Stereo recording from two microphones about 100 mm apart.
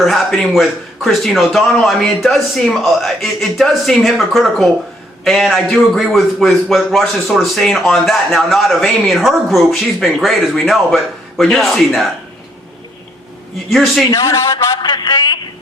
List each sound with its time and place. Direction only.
0.0 s a man's voice: 5° left (ahead or behind)
13.7 s a man's voice: centre (ahead or behind)
14.1 s a man's voice: 35° left (ahead or behind)